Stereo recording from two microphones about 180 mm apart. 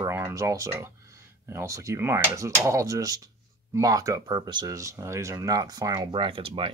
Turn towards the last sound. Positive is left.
turn(degrees=-30)  # may be behind; listen again after turning